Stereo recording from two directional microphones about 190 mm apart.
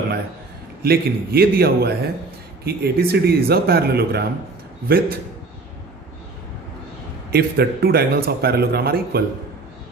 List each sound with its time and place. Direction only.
0.8 s a man's voice: 55° right (ahead or behind)
7.3 s a man's voice: 55° right (ahead or behind)